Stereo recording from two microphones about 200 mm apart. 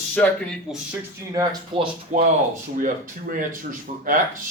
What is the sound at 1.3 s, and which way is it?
Speech, 20° right (ahead or behind).